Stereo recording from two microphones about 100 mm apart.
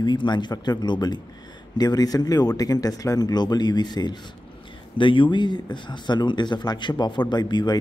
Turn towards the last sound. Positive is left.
turn(degrees=45)  # may be behind; listen again after turning